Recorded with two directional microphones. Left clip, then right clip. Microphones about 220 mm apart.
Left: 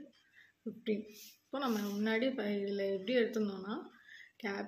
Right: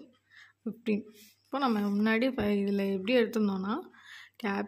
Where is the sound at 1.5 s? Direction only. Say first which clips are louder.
Right 7 dB; 45° right (ahead or behind).